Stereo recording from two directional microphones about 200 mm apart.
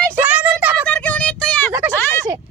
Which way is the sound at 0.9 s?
5° left (ahead or behind).